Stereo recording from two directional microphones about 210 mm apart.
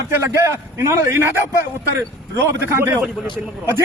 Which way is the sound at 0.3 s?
10° right (ahead or behind).